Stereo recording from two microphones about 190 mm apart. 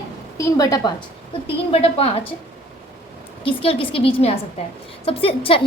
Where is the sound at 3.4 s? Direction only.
30° left (ahead or behind).